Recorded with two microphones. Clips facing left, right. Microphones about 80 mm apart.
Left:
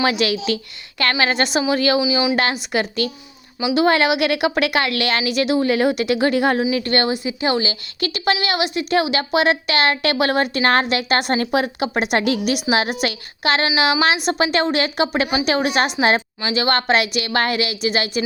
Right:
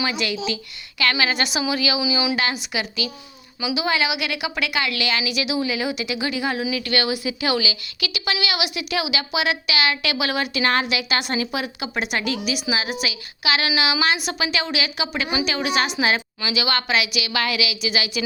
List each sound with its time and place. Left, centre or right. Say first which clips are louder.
0.0 s a woman's voice: left 6 dB; left
2.0 s a woman's voice: left 4 dB; left
2.3 s a woman's voice: left 5 dB; left
6.6 s a woman's voice: left 5 dB; left